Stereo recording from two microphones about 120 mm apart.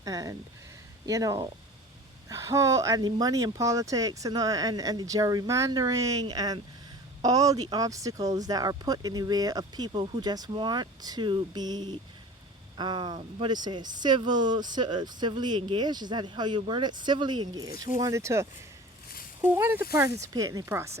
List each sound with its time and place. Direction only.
0.0 s speech: 30° right (ahead or behind)